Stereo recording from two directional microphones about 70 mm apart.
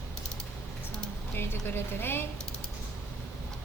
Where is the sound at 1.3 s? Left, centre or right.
Left.